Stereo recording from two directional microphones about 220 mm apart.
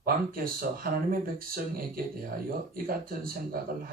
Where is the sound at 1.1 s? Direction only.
40° right (ahead or behind).